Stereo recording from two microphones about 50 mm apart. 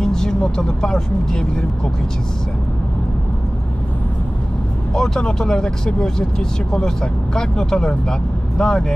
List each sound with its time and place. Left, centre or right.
0.0 s speech: centre
4.9 s speech: centre